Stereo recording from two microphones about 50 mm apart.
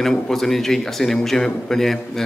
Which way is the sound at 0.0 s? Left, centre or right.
Centre.